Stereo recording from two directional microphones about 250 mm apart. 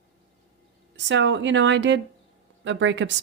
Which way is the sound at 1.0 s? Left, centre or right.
Right.